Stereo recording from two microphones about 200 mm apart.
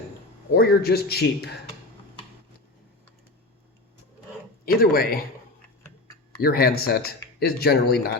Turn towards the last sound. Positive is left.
turn(degrees=50)  # may be behind; listen again after turning